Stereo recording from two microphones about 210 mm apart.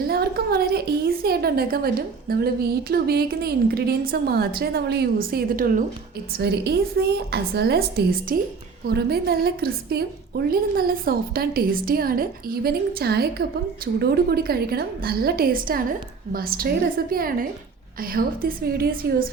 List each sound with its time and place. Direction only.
0.1 s a woman's voice: 50° right (ahead or behind)